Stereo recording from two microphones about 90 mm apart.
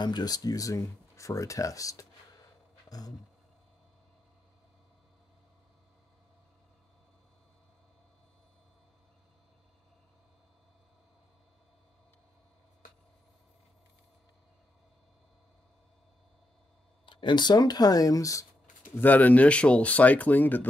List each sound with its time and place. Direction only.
0.0 s speech: 50° left (ahead or behind)
17.0 s speech: 60° left (ahead or behind); by 18.5 s 40° left (ahead or behind)
18.9 s speech: 20° left (ahead or behind)